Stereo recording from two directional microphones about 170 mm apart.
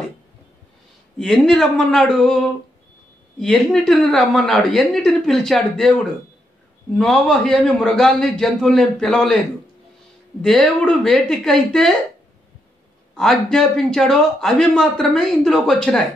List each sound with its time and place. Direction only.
1.1 s a man's voice: centre (ahead or behind)
7.0 s a man's voice: 5° left (ahead or behind)
10.4 s a man's voice: 5° left (ahead or behind)
13.1 s a man's voice: centre (ahead or behind)